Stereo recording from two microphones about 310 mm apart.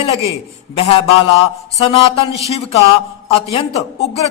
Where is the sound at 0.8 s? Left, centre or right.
Centre.